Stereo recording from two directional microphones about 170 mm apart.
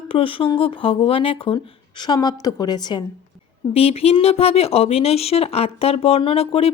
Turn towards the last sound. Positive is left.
turn(degrees=35)  # may be behind; listen again after turning